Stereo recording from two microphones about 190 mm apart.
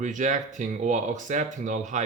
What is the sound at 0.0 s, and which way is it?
Speech, 40° right (ahead or behind).